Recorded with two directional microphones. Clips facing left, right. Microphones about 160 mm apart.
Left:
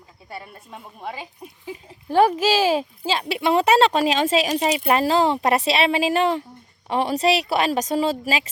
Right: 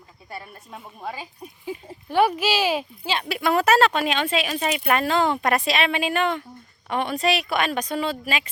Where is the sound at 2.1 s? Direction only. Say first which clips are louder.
Left 3 dB; 35° left (ahead or behind).